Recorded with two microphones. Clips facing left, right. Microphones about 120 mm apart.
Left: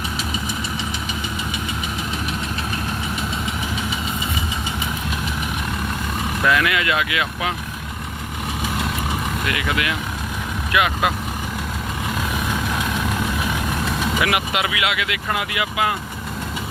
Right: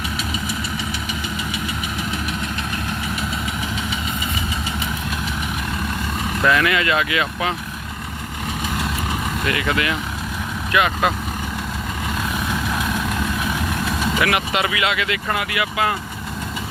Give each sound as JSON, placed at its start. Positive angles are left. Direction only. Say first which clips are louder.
{"t": 6.4, "sound": "speech", "louder": "right 2 dB", "side_deg": 5}
{"t": 9.5, "sound": "speech", "louder": "right 3 dB", "side_deg": 5}
{"t": 14.2, "sound": "speech", "louder": "right 2 dB", "side_deg": 15}
{"t": 15.4, "sound": "speech", "louder": "left 1 dB", "side_deg": 20}